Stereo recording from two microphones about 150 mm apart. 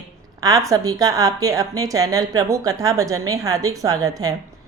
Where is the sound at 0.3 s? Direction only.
25° right (ahead or behind).